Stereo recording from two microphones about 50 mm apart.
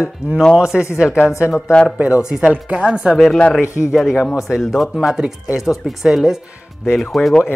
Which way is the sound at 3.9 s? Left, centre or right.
Centre.